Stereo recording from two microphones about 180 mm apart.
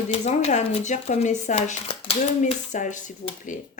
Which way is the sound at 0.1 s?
35° left (ahead or behind).